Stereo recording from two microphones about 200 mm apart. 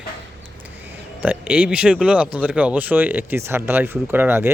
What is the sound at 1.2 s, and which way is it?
Speech, 10° right (ahead or behind).